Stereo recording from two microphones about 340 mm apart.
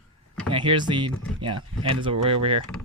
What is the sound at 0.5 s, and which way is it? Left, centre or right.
Speech, centre.